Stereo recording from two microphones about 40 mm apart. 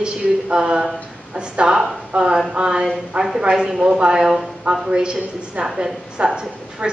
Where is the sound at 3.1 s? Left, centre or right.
Right.